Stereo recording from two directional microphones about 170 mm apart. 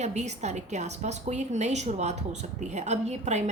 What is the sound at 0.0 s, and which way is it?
A woman's voice, 45° right (ahead or behind).